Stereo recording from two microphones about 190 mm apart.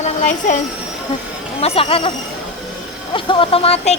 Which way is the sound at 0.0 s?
40° left (ahead or behind).